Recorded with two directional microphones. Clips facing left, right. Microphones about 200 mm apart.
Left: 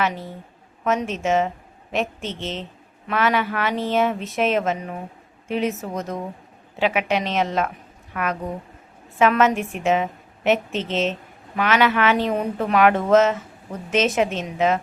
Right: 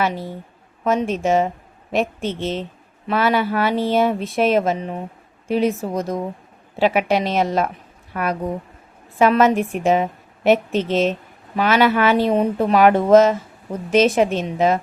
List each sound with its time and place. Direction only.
0.9 s a woman's voice: 35° right (ahead or behind)